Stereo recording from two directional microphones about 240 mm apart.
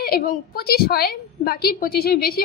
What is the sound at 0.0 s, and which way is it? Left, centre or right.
A woman's voice, left.